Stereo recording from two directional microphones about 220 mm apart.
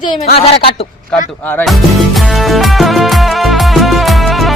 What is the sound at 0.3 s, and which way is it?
Speech, 25° left (ahead or behind).